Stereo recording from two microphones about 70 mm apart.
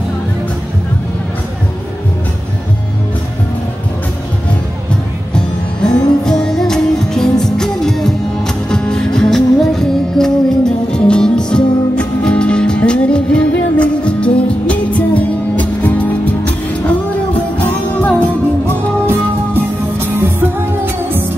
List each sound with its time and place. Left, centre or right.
5.3 s music: centre
20.2 s music: right